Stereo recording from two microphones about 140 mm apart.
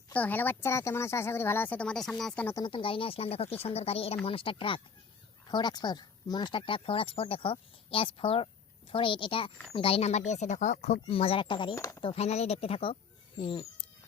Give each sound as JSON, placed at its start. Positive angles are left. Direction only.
{"t": 0.1, "sound": "speech", "side_deg": 10}
{"t": 2.6, "sound": "speech", "side_deg": 35}
{"t": 11.7, "sound": "speech", "side_deg": 20}
{"t": 12.0, "sound": "speech", "side_deg": 50}